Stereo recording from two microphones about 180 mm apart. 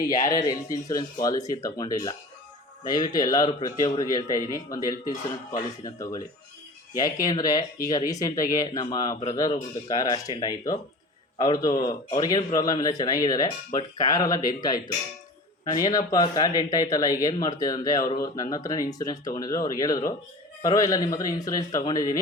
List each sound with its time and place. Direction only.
0.3 s speech: 20° left (ahead or behind)